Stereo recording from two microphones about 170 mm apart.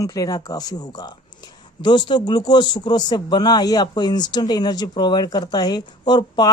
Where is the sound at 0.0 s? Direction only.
20° left (ahead or behind).